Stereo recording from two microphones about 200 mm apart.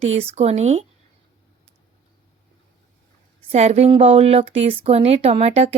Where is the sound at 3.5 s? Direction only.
35° right (ahead or behind).